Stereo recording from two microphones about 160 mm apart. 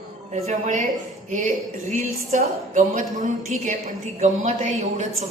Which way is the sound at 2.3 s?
50° right (ahead or behind).